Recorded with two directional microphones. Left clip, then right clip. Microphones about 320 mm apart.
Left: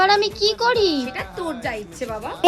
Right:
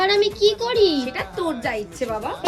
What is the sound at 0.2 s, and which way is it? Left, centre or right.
Speech, centre.